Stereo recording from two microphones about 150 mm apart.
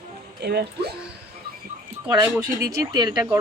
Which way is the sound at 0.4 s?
90° right.